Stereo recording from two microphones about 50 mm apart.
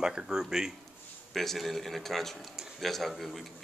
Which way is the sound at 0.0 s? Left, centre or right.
Centre.